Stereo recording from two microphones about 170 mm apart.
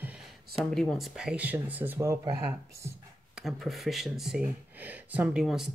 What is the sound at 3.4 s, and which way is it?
Speech, centre (ahead or behind).